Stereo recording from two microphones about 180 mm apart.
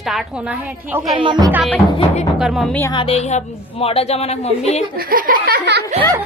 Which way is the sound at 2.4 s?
Centre (ahead or behind).